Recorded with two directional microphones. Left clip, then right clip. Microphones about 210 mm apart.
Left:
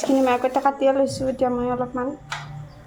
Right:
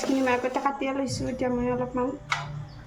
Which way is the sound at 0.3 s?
30° left (ahead or behind).